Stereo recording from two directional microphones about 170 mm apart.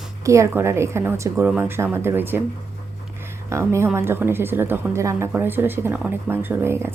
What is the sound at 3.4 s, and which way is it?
Speech, 15° right (ahead or behind).